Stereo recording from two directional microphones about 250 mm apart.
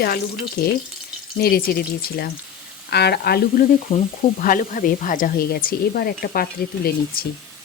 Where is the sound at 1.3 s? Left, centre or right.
Left.